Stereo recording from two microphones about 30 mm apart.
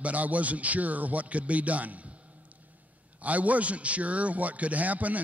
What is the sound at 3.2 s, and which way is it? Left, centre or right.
A man's voice, right.